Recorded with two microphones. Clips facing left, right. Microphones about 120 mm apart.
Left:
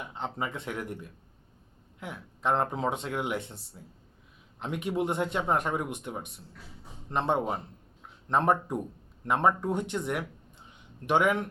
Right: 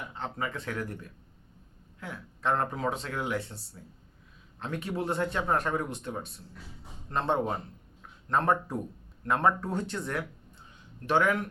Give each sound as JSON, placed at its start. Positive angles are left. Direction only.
{"t": 0.1, "sound": "speech", "side_deg": 20}
{"t": 2.0, "sound": "speech", "side_deg": 20}